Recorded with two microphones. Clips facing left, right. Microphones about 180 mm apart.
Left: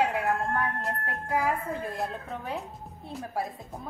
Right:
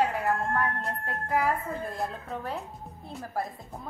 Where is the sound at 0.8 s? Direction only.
Centre (ahead or behind).